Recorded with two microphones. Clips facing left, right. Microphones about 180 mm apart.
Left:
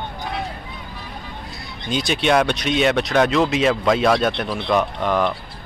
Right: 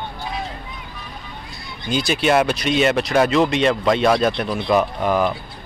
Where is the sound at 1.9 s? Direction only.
Centre (ahead or behind).